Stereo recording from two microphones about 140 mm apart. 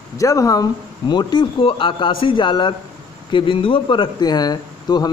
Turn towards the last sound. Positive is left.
turn(degrees=30)  # may be behind; listen again after turning